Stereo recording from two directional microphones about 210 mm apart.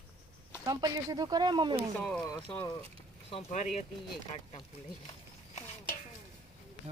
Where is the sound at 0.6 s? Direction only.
20° right (ahead or behind).